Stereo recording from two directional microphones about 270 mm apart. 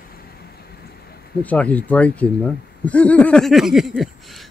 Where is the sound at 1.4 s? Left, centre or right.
Centre.